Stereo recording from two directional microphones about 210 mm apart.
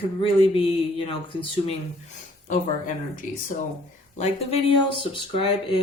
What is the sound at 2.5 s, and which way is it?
Speech, 40° left (ahead or behind).